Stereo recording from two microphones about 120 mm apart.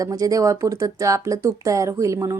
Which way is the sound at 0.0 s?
30° right (ahead or behind).